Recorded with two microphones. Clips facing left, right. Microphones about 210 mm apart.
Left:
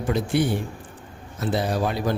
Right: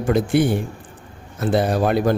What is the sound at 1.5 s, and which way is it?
Speech, 55° right (ahead or behind).